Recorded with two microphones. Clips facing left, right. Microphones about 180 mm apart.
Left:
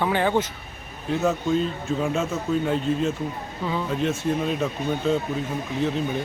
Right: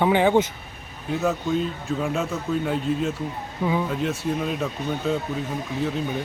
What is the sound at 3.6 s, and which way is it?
Speech, 10° right (ahead or behind).